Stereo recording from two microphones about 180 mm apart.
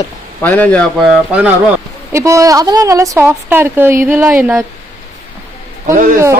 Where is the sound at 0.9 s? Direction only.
10° right (ahead or behind).